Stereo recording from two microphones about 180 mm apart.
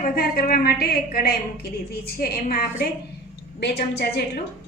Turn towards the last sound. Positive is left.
turn(degrees=60)  # may be behind; listen again after turning